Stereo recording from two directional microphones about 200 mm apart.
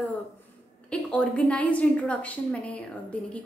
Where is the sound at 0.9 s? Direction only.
5° left (ahead or behind).